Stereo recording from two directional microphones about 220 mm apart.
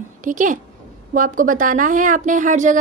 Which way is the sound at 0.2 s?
35° right (ahead or behind).